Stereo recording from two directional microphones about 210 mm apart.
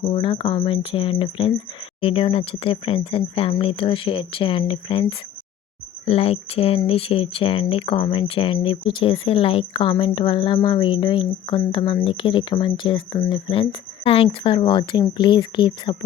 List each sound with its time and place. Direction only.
0.0 s a woman's voice: 25° left (ahead or behind)